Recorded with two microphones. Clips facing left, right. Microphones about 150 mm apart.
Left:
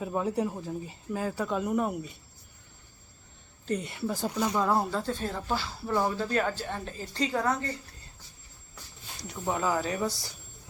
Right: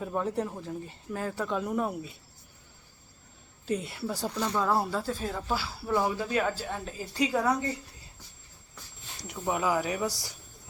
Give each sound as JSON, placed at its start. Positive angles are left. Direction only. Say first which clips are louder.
{"t": 0.0, "sound": "speech", "louder": "left 1 dB", "side_deg": 5}
{"t": 3.7, "sound": "speech", "louder": "left 1 dB", "side_deg": 0}
{"t": 4.3, "sound": "speech", "louder": "left 1 dB", "side_deg": 10}
{"t": 9.1, "sound": "a sound", "louder": "even", "side_deg": -20}
{"t": 9.4, "sound": "speech", "louder": "right 1 dB", "side_deg": -10}